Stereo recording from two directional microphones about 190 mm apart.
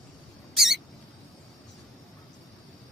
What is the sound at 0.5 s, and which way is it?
Rodents, centre (ahead or behind).